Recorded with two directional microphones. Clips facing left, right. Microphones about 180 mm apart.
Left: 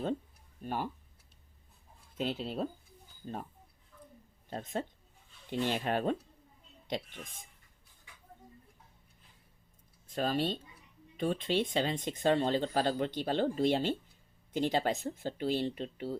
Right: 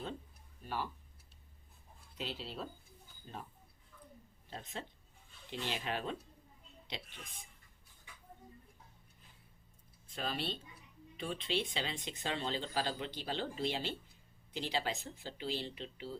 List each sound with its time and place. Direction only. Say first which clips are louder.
0.6 s speech: left 4 dB; 50° left (ahead or behind)
2.1 s speech: left 8 dB; 50° left (ahead or behind)
4.4 s speech: left 9 dB; 45° left (ahead or behind)
10.1 s speech: left 8 dB; 45° left (ahead or behind)